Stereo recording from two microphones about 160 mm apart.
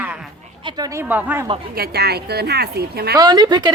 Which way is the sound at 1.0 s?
10° right (ahead or behind).